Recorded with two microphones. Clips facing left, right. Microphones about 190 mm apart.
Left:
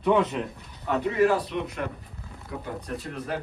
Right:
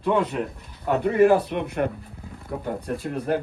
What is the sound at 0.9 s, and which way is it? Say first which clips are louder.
Speech: right 5 dB; 55° right (ahead or behind).